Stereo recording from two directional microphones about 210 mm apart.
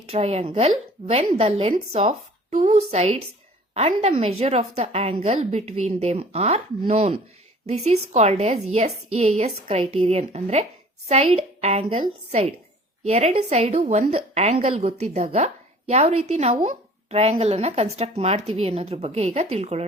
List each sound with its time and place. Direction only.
0.0 s a woman's voice: 30° right (ahead or behind)